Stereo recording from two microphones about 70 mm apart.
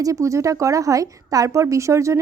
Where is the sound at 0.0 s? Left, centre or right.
Right.